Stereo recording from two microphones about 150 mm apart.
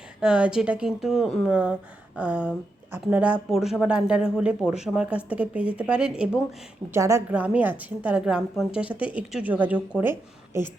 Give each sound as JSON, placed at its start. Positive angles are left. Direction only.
{"t": 0.2, "sound": "a woman's voice", "side_deg": -5}
{"t": 6.9, "sound": "a woman's voice", "side_deg": -20}